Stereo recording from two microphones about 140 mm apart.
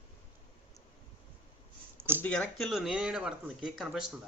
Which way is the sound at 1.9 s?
15° right (ahead or behind).